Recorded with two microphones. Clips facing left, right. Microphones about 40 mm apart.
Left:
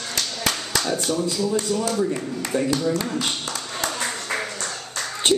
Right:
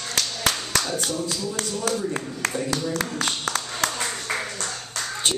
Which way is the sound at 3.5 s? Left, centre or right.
Right.